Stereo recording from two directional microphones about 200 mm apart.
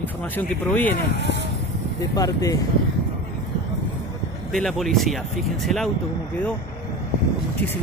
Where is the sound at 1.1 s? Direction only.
60° right (ahead or behind).